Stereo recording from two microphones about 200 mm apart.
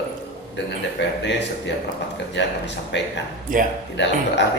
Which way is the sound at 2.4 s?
60° left (ahead or behind).